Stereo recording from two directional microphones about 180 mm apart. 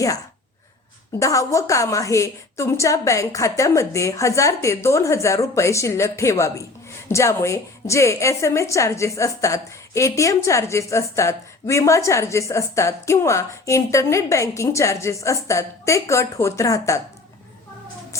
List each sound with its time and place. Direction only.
1.2 s a woman's voice: 15° left (ahead or behind)